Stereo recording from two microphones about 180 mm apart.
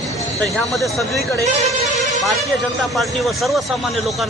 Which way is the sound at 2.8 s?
Centre (ahead or behind).